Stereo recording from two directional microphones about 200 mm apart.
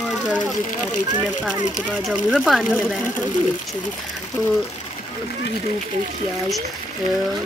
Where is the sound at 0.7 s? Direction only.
40° left (ahead or behind).